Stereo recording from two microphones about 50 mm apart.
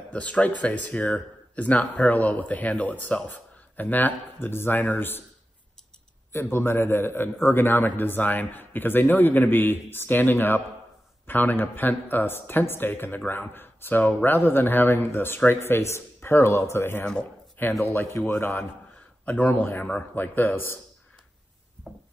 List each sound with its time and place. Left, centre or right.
0.1 s a man's voice: left
6.3 s a man's voice: left
17.0 s speech: centre
17.6 s a man's voice: left
18.2 s speech: left
19.2 s a man's voice: left